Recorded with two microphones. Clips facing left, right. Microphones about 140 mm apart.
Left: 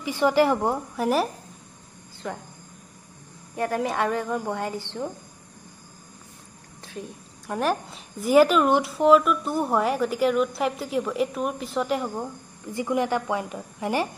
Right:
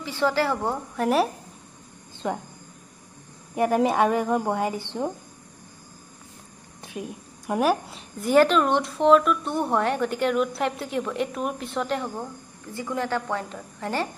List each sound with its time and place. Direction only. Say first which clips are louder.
0.0 s a woman's voice: left 3 dB; 15° left (ahead or behind)
0.9 s a woman's voice: right 4 dB; centre (ahead or behind)
2.2 s a woman's voice: right 5 dB; 20° right (ahead or behind)
3.5 s a woman's voice: right 5 dB; 20° right (ahead or behind)
6.8 s a woman's voice: right 3 dB; 15° right (ahead or behind); by 14.0 s 15° left (ahead or behind)